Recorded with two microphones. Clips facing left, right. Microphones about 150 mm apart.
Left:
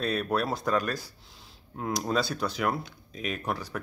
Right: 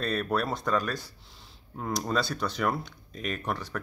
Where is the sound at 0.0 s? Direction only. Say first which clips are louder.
Left 1 dB; centre (ahead or behind).